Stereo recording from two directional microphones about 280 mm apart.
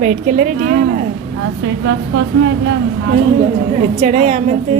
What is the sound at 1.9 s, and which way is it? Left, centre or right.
A woman's voice, right.